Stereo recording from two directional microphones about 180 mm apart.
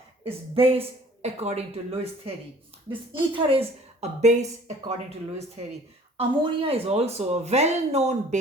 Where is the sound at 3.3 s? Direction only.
30° right (ahead or behind).